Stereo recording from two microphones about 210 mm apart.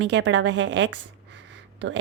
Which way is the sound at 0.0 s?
60° right (ahead or behind).